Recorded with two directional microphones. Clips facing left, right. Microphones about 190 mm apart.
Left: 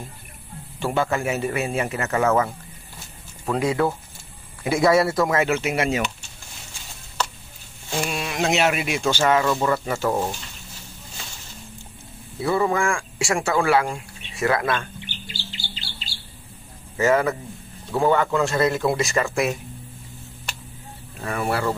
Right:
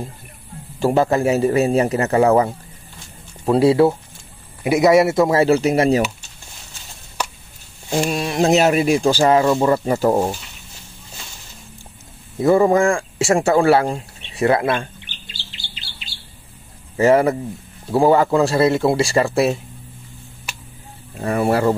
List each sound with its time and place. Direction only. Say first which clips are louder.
0.7 s speech: right 7 dB; 40° right (ahead or behind)
4.6 s speech: right 5 dB; 20° right (ahead or behind); by 6.0 s 35° right (ahead or behind)
7.9 s speech: right 7 dB; 35° right (ahead or behind)
12.4 s speech: right 8 dB; 45° right (ahead or behind)
16.9 s speech: right 5 dB; 30° right (ahead or behind)
21.2 s speech: right 7 dB; 35° right (ahead or behind)